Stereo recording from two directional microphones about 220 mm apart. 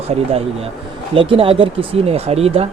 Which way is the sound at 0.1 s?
25° right (ahead or behind).